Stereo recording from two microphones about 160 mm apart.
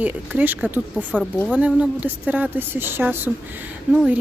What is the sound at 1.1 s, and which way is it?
Speech, 5° left (ahead or behind).